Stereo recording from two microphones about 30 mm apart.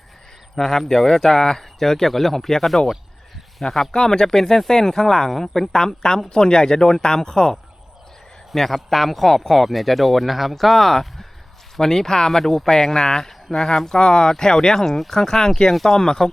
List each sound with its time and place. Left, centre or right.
0.6 s speech: centre
8.5 s speech: centre
11.8 s speech: centre
14.8 s speech: centre
15.3 s speech: left
15.7 s speech: centre
16.0 s speech: centre